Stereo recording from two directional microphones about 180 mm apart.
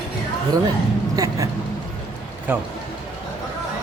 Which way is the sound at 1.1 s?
20° right (ahead or behind).